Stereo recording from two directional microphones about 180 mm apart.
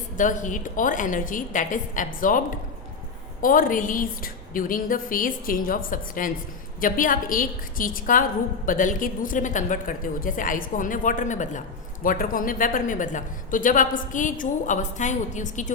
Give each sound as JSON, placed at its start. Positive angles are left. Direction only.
{"t": 0.2, "sound": "a woman's voice", "side_deg": 45}
{"t": 3.4, "sound": "a woman's voice", "side_deg": 50}